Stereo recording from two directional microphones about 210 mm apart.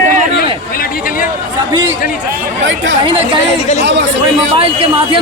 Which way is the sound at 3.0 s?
25° right (ahead or behind).